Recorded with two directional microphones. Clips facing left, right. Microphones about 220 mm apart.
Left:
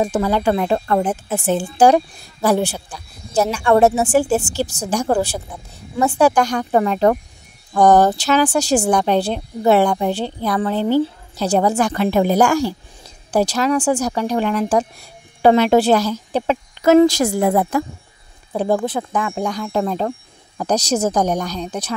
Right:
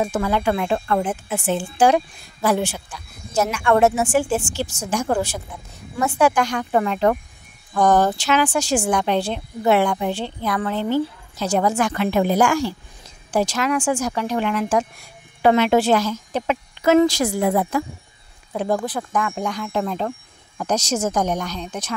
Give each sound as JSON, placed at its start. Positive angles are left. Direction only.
{"t": 0.0, "sound": "speech", "side_deg": 30}
{"t": 18.5, "sound": "speech", "side_deg": 30}